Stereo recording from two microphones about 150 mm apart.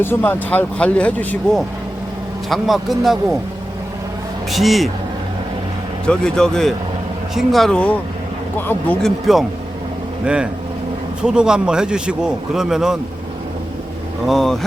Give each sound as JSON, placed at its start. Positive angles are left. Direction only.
{"t": 0.0, "sound": "a man's voice", "side_deg": 15}
{"t": 4.5, "sound": "a man's voice", "side_deg": 0}
{"t": 6.1, "sound": "a man's voice", "side_deg": 5}
{"t": 14.3, "sound": "a man's voice", "side_deg": 0}